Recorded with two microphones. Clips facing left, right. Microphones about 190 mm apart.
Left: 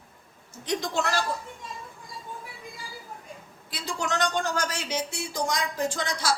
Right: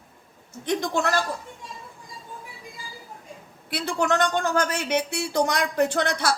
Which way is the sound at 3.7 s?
60° right (ahead or behind).